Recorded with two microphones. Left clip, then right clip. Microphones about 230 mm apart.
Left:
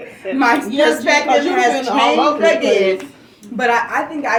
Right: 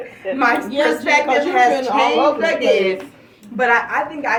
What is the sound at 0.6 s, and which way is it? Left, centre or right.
Speech, right.